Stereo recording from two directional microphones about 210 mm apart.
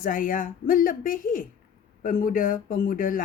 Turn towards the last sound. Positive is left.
turn(degrees=40)  # may be behind; listen again after turning